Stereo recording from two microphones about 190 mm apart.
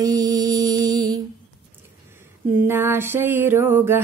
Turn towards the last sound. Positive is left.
turn(degrees=-10)  # may be behind; listen again after turning